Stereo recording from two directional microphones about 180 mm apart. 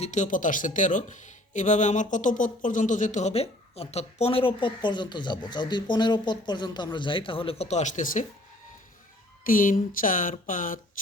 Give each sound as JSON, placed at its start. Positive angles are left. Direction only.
{"t": 0.0, "sound": "speech", "side_deg": 40}
{"t": 9.5, "sound": "speech", "side_deg": 50}